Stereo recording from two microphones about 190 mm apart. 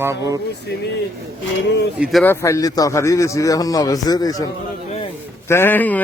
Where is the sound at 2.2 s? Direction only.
15° left (ahead or behind).